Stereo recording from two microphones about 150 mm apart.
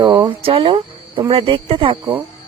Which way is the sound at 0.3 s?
40° right (ahead or behind).